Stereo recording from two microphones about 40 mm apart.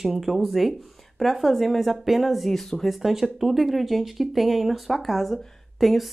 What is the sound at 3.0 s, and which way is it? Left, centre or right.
Speech, centre.